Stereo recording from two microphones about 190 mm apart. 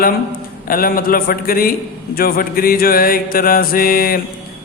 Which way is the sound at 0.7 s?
50° left (ahead or behind).